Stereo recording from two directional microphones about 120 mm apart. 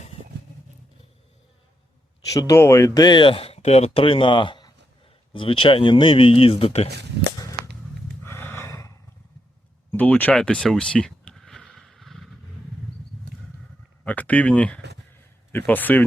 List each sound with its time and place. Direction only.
2.3 s speech: 25° left (ahead or behind)
3.0 s speech: 40° left (ahead or behind); by 6.9 s 60° left (ahead or behind)
8.2 s a sound: 15° left (ahead or behind)
9.9 s speech: 15° left (ahead or behind)
10.3 s a sound: 5° left (ahead or behind)
14.0 s speech: 15° left (ahead or behind)